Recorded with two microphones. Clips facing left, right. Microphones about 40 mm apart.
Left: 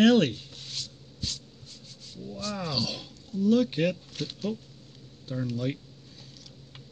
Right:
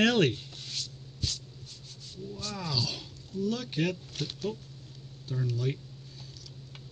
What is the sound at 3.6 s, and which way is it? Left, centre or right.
Speech, centre.